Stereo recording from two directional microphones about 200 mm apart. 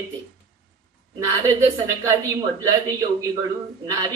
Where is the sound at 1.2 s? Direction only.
15° right (ahead or behind).